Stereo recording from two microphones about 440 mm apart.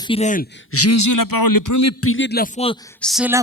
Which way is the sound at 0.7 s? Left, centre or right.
Left.